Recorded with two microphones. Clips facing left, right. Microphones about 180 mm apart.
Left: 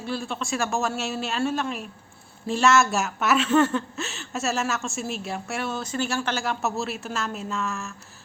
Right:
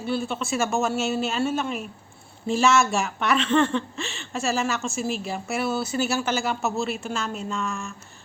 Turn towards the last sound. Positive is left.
turn(degrees=0)  # may be behind; listen again after turning